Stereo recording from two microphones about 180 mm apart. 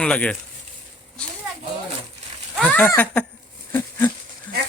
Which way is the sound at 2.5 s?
5° left (ahead or behind).